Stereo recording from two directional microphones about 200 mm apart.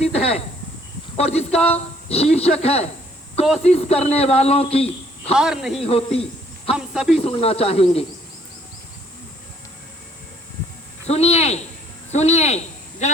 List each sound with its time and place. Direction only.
0.0 s a sound: 30° left (ahead or behind)
1.1 s a man's voice: 30° left (ahead or behind)
5.3 s speech: 5° right (ahead or behind)
5.8 s speech: 30° left (ahead or behind)
6.7 s speech: 5° right (ahead or behind)
7.2 s speech: 30° left (ahead or behind)
11.0 s a man's voice: 30° left (ahead or behind)